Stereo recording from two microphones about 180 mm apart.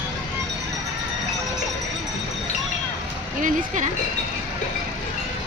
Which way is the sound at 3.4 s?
45° right (ahead or behind).